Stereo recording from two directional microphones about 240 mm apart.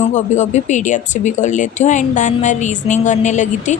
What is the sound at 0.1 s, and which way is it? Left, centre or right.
Speech, left.